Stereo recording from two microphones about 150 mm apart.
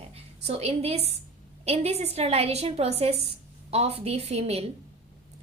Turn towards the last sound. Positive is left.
turn(degrees=-45)  # may be behind; listen again after turning